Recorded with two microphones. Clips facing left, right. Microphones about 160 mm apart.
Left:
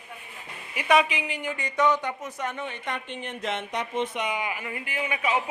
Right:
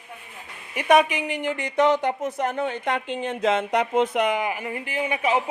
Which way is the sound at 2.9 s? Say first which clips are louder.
Right 8 dB; 90° right.